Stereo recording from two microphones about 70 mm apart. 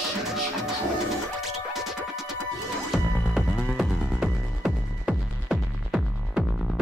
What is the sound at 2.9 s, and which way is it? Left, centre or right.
Music, centre.